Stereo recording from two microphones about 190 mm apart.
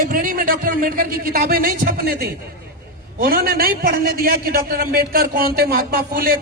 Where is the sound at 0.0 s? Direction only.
50° right (ahead or behind).